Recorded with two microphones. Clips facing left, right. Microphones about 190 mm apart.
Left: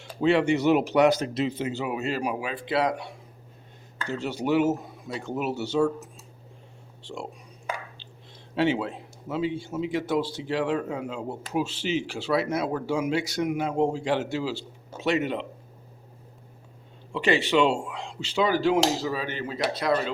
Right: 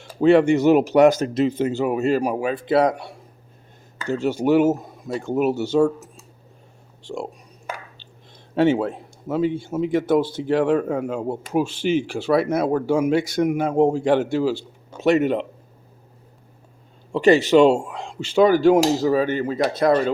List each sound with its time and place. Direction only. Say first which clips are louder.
0.0 s speech: right 7 dB; 50° right (ahead or behind)
4.1 s speech: right 7 dB; 45° right (ahead or behind)
8.5 s speech: right 6 dB; 50° right (ahead or behind)
17.1 s speech: right 9 dB; 45° right (ahead or behind)